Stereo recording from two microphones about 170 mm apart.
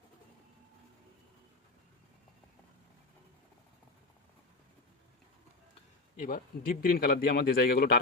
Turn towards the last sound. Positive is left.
turn(degrees=60)  # may be behind; listen again after turning